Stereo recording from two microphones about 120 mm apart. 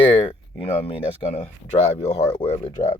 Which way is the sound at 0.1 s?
50° left (ahead or behind).